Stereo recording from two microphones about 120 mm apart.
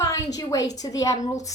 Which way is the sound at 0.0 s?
30° left (ahead or behind).